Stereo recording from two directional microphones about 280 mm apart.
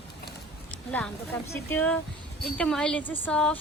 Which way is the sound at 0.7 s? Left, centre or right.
Centre.